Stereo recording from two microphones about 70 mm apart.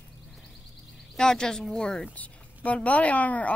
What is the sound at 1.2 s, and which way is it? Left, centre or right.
Speech, centre.